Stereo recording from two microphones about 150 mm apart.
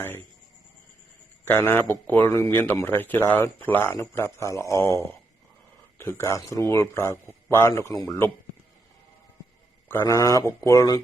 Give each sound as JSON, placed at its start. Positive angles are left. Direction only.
{"t": 1.5, "sound": "speech", "side_deg": 15}
{"t": 9.9, "sound": "speech", "side_deg": 20}